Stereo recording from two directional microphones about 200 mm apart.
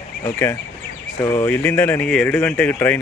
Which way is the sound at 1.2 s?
15° left (ahead or behind).